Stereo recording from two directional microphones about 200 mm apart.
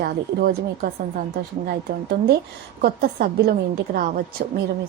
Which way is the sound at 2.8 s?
50° right (ahead or behind).